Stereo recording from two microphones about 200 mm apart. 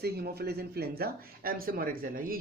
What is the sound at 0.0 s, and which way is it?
Speech, 50° right (ahead or behind).